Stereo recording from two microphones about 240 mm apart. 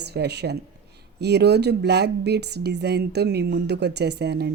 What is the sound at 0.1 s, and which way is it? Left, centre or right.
Speech, right.